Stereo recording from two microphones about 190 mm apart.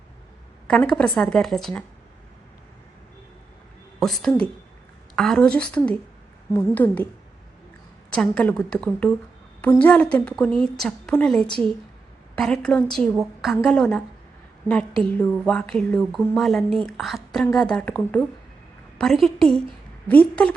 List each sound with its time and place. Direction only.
0.9 s a woman's voice: 5° left (ahead or behind)
4.0 s a woman's voice: 5° left (ahead or behind)
8.1 s a woman's voice: 5° left (ahead or behind)